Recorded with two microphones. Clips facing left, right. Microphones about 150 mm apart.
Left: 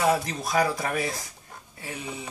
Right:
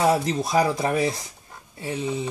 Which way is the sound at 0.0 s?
25° right (ahead or behind).